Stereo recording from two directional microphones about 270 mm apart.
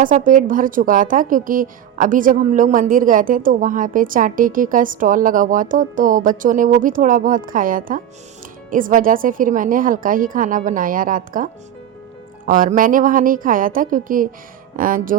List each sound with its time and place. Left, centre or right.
0.0 s a woman's voice: right
12.5 s a woman's voice: right